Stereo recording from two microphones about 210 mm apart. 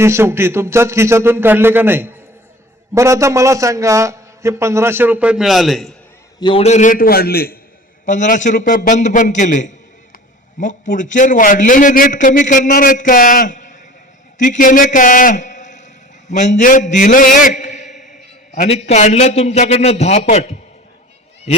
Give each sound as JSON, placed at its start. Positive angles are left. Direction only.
{"t": 0.0, "sound": "a man's voice", "side_deg": -10}
{"t": 6.4, "sound": "a man's voice", "side_deg": 25}